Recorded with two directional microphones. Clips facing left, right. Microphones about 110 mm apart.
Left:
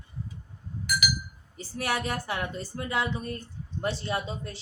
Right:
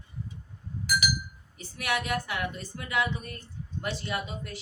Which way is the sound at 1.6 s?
35° left (ahead or behind).